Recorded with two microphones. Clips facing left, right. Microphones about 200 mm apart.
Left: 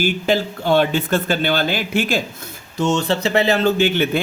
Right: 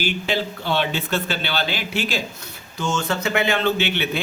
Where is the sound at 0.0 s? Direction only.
50° left (ahead or behind).